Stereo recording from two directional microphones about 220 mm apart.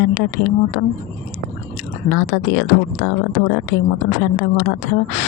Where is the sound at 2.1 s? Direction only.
55° left (ahead or behind).